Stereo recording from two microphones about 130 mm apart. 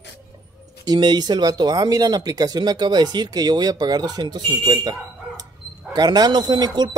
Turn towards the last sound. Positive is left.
turn(degrees=-30)  # may be behind; listen again after turning